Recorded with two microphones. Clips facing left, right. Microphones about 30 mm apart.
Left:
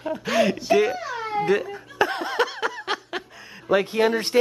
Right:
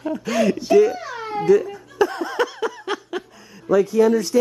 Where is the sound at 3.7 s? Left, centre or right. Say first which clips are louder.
Right 4 dB; left.